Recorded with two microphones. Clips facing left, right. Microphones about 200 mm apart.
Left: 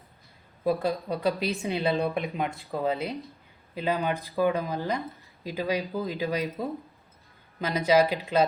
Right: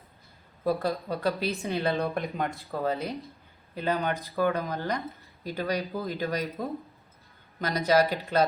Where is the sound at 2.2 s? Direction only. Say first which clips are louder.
Left 1 dB; centre (ahead or behind).